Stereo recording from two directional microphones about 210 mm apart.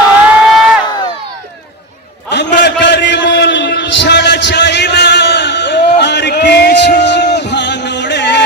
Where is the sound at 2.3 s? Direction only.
55° left (ahead or behind).